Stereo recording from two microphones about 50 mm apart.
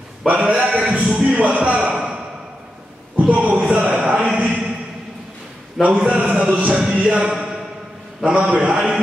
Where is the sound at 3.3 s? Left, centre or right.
Right.